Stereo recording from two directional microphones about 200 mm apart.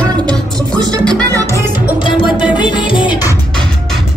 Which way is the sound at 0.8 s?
5° left (ahead or behind).